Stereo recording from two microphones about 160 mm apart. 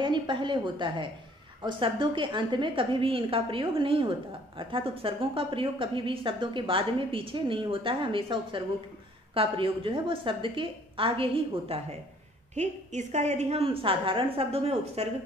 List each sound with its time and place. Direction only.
0.0 s a woman's voice: 30° right (ahead or behind)
12.5 s a woman's voice: 45° right (ahead or behind)